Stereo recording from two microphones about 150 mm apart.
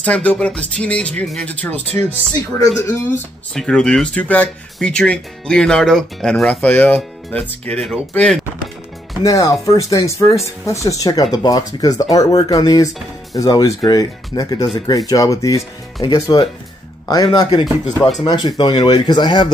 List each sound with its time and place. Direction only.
0.0 s speech: 10° left (ahead or behind)
3.5 s speech: 5° left (ahead or behind)
9.2 s speech: 20° left (ahead or behind)